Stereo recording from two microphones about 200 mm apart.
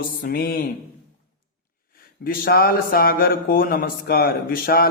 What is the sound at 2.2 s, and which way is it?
Speech, 45° left (ahead or behind).